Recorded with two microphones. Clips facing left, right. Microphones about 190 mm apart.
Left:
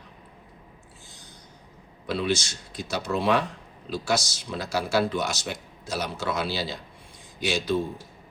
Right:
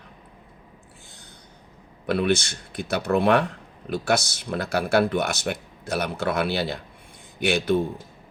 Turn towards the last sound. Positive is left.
turn(degrees=-60)  # may be behind; listen again after turning